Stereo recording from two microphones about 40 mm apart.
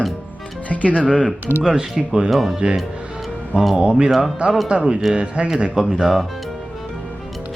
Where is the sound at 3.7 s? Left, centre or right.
Right.